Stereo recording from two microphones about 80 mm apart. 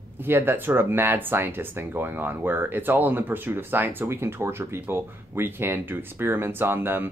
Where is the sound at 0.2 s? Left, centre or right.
Right.